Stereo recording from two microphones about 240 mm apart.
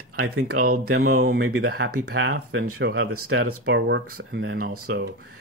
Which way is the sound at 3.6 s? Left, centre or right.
Right.